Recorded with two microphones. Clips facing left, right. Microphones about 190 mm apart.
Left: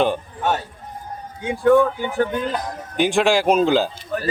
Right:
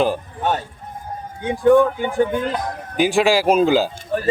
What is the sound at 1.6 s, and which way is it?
Speech, 15° right (ahead or behind).